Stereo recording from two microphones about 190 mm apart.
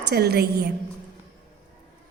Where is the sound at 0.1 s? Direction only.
55° right (ahead or behind).